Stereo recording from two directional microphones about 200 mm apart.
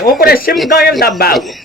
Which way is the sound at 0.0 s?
45° left (ahead or behind).